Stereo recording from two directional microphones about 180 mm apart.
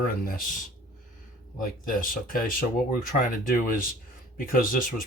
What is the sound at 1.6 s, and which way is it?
Speech, 50° left (ahead or behind).